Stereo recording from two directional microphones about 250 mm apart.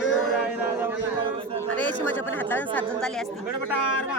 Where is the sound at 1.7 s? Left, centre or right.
Centre.